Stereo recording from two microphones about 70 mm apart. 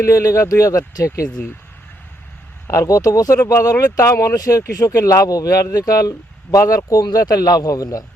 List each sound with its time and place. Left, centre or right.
0.0 s speech: left
2.6 s speech: left